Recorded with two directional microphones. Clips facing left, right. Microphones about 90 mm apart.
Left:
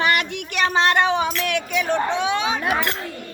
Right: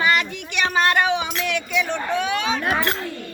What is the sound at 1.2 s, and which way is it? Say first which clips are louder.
Music: left 3 dB; 55° left (ahead or behind).